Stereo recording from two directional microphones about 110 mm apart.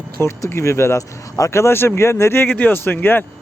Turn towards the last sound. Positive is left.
turn(degrees=20)  # may be behind; listen again after turning